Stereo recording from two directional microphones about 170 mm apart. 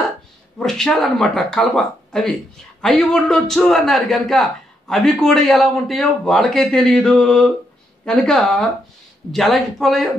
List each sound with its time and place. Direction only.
0.6 s a man's voice: centre (ahead or behind)